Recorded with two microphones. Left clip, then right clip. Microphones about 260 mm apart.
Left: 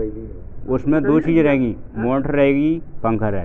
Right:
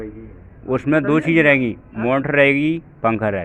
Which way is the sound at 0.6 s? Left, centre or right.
Right.